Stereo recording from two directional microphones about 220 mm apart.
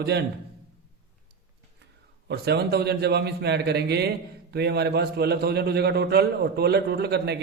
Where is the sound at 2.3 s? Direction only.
50° right (ahead or behind).